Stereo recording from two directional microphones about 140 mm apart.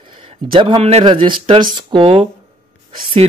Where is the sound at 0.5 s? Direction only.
40° right (ahead or behind).